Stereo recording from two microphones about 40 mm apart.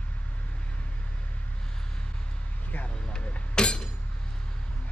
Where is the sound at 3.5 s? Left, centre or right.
Left.